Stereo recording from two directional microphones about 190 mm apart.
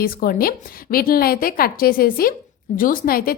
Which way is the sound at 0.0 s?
50° left (ahead or behind).